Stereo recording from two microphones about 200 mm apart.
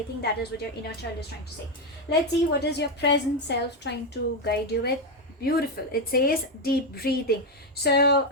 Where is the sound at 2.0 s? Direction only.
55° left (ahead or behind).